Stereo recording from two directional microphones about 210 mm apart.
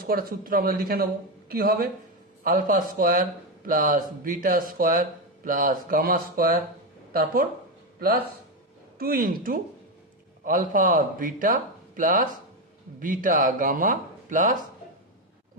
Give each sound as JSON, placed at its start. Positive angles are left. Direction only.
{"t": 0.0, "sound": "speech", "side_deg": -45}